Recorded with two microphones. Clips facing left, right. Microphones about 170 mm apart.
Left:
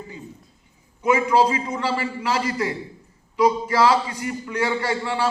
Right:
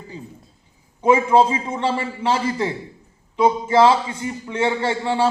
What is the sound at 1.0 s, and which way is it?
A man's voice, 25° right (ahead or behind).